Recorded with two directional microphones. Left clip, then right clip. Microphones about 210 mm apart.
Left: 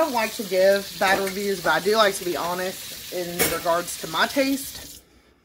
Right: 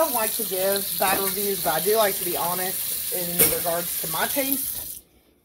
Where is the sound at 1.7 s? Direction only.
20° left (ahead or behind).